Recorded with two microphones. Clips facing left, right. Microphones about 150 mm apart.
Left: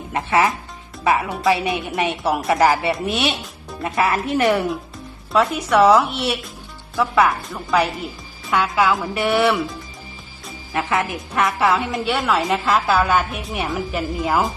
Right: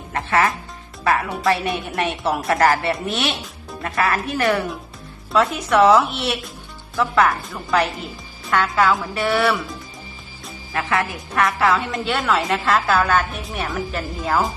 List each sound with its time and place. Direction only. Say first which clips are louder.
0.1 s a woman's voice: left 1 dB; 15° left (ahead or behind)
5.3 s a woman's voice: left 1 dB; centre (ahead or behind)
9.1 s speech: left 2 dB; 20° left (ahead or behind)
10.8 s speech: left 1 dB; 20° left (ahead or behind)
12.0 s a woman's voice: left 1 dB; 5° left (ahead or behind)